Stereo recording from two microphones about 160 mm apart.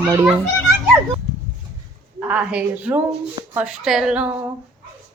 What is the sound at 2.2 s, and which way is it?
Speech, 10° right (ahead or behind).